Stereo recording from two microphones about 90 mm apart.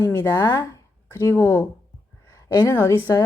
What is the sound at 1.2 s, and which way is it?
Speech, 35° left (ahead or behind).